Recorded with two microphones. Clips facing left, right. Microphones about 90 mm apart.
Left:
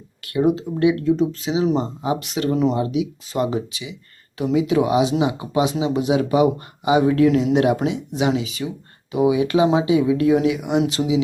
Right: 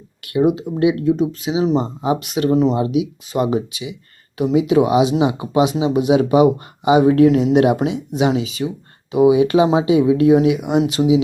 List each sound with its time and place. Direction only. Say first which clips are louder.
0.2 s speech: right 2 dB; 15° right (ahead or behind)
1.7 s speech: right 3 dB; 25° right (ahead or behind)